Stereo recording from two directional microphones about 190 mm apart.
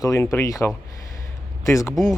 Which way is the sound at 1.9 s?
Centre (ahead or behind).